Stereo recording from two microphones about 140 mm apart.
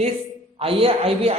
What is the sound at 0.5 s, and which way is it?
Speech, 40° right (ahead or behind).